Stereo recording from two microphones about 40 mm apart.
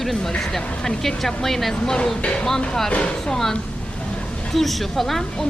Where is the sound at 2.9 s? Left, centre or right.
Left.